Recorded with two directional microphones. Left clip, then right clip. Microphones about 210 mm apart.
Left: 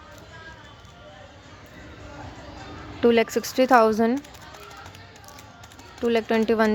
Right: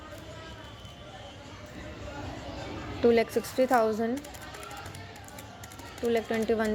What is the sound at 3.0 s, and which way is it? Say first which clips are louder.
A woman's voice: left 4 dB; 15° left (ahead or behind).